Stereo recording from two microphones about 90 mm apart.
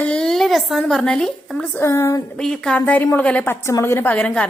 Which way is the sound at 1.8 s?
30° left (ahead or behind).